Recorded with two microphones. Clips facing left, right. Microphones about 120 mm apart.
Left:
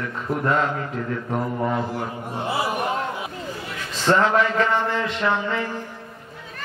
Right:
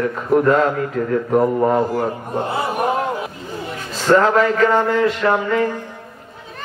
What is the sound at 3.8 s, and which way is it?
A man's voice, 40° right (ahead or behind).